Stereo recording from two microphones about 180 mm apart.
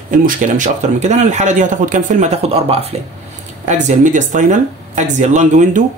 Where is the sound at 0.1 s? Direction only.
45° right (ahead or behind).